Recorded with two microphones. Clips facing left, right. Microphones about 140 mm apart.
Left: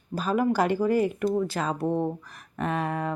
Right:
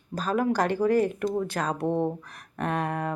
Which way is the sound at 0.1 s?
5° left (ahead or behind).